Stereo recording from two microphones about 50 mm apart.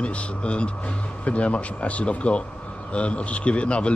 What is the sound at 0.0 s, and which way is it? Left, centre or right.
A man's voice, left.